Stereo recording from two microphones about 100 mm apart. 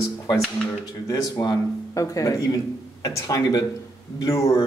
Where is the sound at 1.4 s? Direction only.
40° left (ahead or behind).